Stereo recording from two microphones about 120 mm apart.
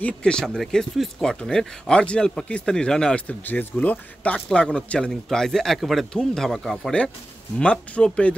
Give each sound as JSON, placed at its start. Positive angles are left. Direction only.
{"t": 0.0, "sound": "speech", "side_deg": 5}